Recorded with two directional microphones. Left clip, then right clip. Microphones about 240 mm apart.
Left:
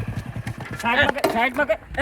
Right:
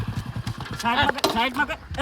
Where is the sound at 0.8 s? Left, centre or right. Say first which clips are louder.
Left 2 dB; centre.